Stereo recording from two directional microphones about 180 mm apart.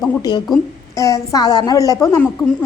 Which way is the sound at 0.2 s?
25° left (ahead or behind).